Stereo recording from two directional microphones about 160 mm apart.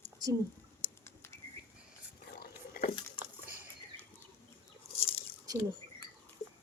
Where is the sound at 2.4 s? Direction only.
60° left (ahead or behind).